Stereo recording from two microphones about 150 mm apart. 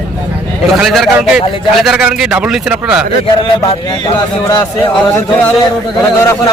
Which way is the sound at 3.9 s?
30° left (ahead or behind).